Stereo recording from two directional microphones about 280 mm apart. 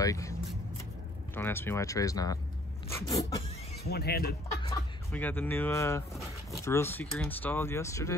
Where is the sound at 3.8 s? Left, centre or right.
Left.